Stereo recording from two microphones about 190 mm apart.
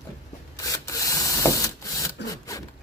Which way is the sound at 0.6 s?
15° left (ahead or behind).